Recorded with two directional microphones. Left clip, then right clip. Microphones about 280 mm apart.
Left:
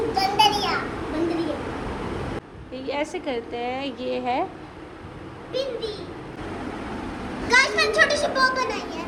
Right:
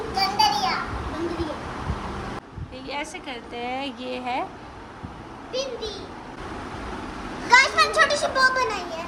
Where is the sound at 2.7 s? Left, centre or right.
Centre.